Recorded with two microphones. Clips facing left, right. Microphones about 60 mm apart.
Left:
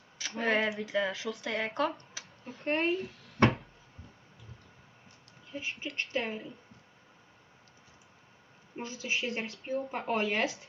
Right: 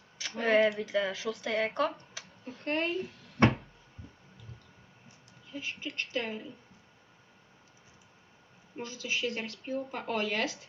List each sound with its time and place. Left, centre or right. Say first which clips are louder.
0.2 s speech: right 4 dB; centre
5.5 s speech: left 1 dB; left
5.9 s speech: left 1 dB; centre
8.7 s a woman's voice: left 1 dB; left
9.1 s speech: right 1 dB; centre